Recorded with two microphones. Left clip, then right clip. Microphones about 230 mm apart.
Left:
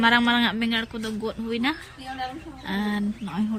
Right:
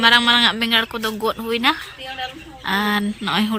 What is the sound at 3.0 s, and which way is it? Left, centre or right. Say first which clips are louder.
Speech: right 10 dB; right.